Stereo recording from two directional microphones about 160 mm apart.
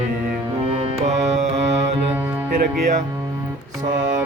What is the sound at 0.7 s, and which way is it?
Music, 40° right (ahead or behind).